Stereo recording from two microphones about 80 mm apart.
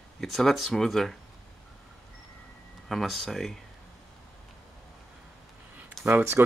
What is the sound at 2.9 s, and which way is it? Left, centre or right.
Speech, centre.